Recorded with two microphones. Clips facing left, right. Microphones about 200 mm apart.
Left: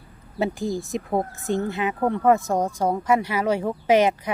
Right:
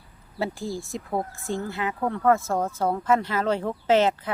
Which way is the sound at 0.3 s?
20° left (ahead or behind).